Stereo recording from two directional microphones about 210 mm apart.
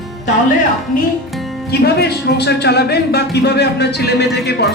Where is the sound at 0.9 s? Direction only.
40° left (ahead or behind).